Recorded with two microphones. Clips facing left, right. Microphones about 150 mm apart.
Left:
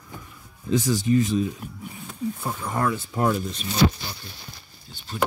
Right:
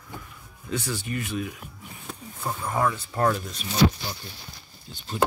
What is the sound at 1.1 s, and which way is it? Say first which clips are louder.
Speech: left 9 dB; 30° left (ahead or behind).